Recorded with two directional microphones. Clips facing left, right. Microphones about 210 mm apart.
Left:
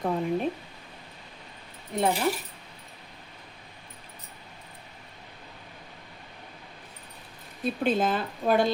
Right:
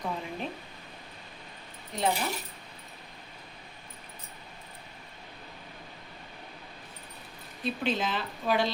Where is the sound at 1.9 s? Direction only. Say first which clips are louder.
Left 4 dB; 50° left (ahead or behind).